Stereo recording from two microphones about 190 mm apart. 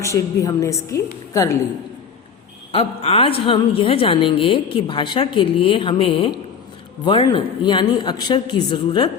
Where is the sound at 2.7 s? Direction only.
30° left (ahead or behind).